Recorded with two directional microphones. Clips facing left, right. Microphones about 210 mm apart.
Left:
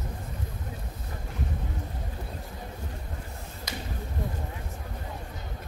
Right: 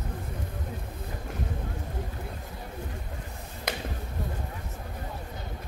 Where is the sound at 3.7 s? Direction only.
60° right (ahead or behind).